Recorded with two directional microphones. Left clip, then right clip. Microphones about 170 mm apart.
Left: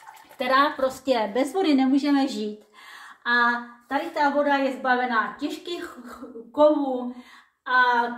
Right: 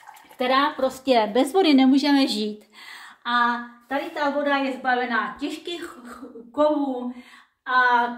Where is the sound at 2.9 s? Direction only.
20° right (ahead or behind).